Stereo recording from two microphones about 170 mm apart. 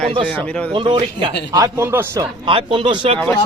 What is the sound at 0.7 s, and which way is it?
Speech, 30° right (ahead or behind).